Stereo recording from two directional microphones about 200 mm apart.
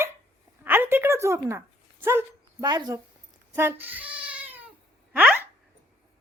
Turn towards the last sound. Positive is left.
turn(degrees=-10)  # may be behind; listen again after turning